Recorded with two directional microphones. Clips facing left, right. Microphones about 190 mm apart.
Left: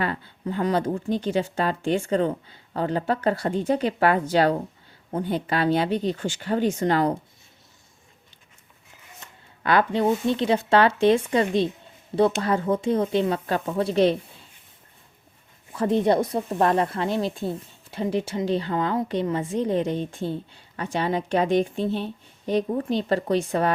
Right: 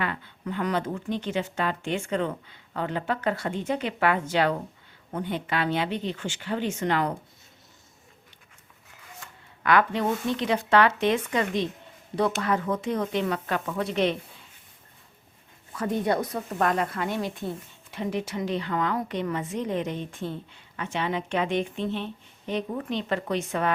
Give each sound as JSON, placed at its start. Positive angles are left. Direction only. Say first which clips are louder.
{"t": 0.0, "sound": "a woman's voice", "louder": "left 4 dB", "side_deg": 35}
{"t": 9.2, "sound": "speech", "louder": "even", "side_deg": 30}
{"t": 15.7, "sound": "a woman's voice", "louder": "left 5 dB", "side_deg": 30}